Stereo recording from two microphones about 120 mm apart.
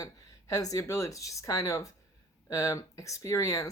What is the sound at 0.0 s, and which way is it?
Speech, 30° left (ahead or behind).